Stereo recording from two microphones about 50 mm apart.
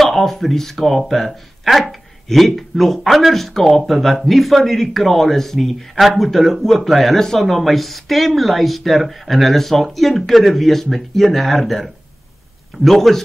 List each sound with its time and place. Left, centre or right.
0.0 s a man's voice: centre